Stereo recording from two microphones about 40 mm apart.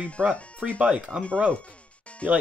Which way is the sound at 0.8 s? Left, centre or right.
Right.